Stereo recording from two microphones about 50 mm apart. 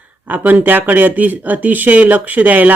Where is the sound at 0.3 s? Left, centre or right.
Right.